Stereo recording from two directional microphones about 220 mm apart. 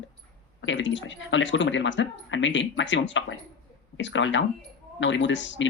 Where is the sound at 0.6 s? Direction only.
55° left (ahead or behind).